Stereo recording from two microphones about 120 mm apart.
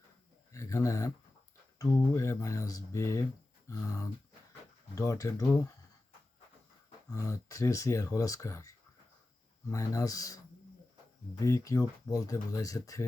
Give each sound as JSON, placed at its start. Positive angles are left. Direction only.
{"t": 0.5, "sound": "speech", "side_deg": 25}
{"t": 7.1, "sound": "speech", "side_deg": 25}